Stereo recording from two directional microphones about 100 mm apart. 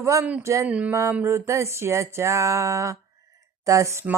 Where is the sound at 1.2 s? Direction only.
25° right (ahead or behind).